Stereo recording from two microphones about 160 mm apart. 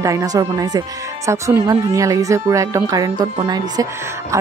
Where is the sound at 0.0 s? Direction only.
20° right (ahead or behind).